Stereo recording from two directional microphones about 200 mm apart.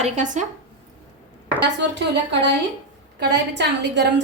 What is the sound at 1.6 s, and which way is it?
A woman's voice, 60° right (ahead or behind).